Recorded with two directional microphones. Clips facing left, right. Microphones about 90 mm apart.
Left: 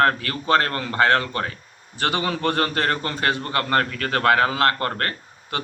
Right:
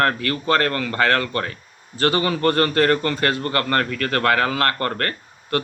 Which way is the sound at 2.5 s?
15° left (ahead or behind).